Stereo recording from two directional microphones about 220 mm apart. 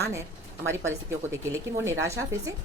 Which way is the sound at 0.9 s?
15° right (ahead or behind).